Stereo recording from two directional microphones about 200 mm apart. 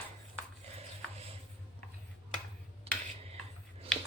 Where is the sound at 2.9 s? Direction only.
30° right (ahead or behind).